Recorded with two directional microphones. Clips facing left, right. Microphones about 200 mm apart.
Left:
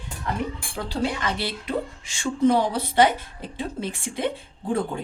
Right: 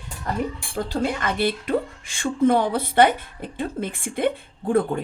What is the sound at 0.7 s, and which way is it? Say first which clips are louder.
Speech: right 3 dB; 50° right (ahead or behind).